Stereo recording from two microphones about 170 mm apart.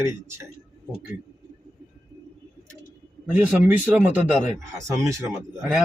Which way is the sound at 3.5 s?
10° right (ahead or behind).